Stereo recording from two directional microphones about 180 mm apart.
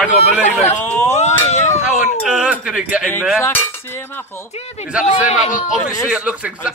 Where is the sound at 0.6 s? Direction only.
10° left (ahead or behind).